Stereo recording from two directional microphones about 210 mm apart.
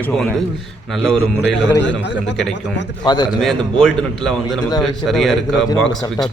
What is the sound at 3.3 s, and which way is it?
A man's voice, centre (ahead or behind).